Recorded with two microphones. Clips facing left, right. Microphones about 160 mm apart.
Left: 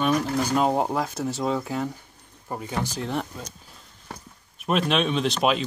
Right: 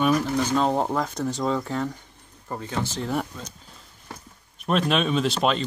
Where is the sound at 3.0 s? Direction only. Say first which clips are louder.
Right 1 dB; 5° right (ahead or behind).